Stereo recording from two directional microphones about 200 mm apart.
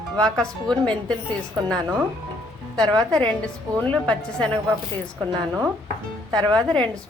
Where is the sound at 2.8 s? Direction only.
20° right (ahead or behind).